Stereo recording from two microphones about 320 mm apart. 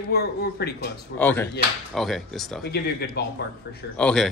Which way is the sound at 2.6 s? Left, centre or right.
Left.